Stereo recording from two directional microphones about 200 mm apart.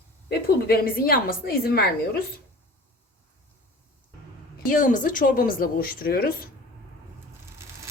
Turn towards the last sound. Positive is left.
turn(degrees=45)  # may be behind; listen again after turning